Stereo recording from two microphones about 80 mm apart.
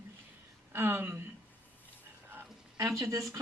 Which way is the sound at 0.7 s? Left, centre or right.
Right.